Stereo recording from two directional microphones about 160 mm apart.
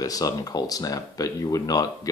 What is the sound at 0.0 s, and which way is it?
Speech, 20° left (ahead or behind).